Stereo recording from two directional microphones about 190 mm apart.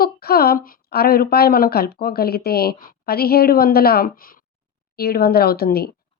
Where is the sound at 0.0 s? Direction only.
55° left (ahead or behind).